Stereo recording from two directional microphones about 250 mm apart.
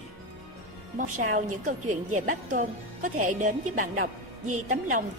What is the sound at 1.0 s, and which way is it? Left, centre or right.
A woman's voice, right.